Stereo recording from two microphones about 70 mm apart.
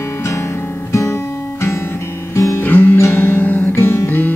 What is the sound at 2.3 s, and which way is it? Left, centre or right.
Music, left.